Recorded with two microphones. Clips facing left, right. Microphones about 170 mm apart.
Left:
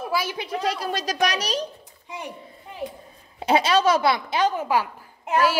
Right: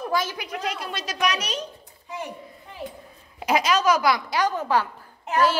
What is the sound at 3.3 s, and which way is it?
A woman's voice, 30° left (ahead or behind).